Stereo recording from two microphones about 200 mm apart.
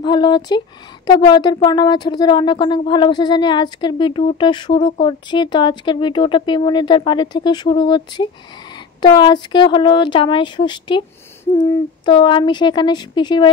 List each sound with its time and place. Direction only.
0.0 s speech: 20° left (ahead or behind)